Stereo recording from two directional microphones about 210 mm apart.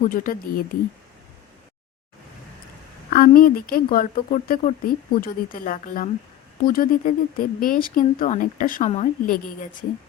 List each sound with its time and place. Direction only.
0.0 s speech: 40° left (ahead or behind)
3.1 s speech: 40° left (ahead or behind)